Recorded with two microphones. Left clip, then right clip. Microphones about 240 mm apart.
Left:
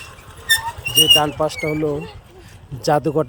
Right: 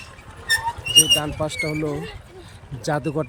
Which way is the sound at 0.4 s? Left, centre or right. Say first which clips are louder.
Left 3 dB; left.